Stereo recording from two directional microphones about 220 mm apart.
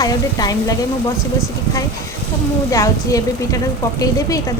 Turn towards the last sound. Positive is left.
turn(degrees=15)  # may be behind; listen again after turning